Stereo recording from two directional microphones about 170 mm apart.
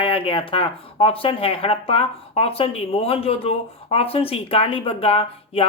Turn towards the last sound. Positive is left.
turn(degrees=35)  # may be behind; listen again after turning